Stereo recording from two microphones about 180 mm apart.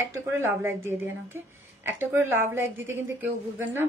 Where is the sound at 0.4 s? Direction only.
15° right (ahead or behind).